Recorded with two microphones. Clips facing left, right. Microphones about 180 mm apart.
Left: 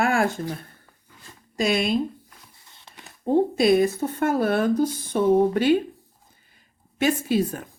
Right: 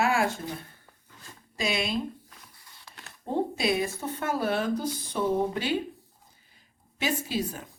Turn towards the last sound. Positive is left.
turn(degrees=55)  # may be behind; listen again after turning